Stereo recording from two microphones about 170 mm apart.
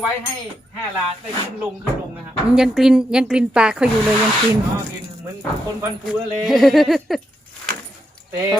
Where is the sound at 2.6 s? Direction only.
5° right (ahead or behind).